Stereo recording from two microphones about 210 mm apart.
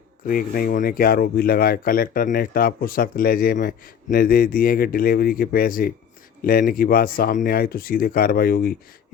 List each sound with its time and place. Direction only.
0.3 s speech: 45° left (ahead or behind)